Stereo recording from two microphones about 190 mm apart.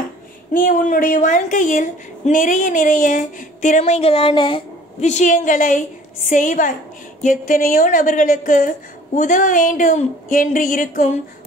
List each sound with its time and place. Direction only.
0.5 s a woman's voice: 45° left (ahead or behind)